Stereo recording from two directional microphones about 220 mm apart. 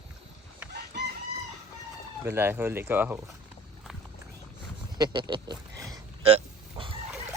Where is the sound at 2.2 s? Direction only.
10° right (ahead or behind).